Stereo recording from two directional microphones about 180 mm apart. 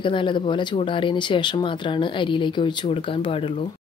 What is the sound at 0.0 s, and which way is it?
Speech, 25° left (ahead or behind).